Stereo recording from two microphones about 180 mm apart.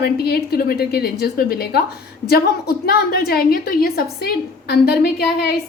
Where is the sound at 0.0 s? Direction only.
60° left (ahead or behind).